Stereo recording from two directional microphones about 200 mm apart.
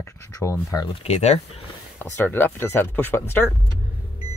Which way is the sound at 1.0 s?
35° left (ahead or behind).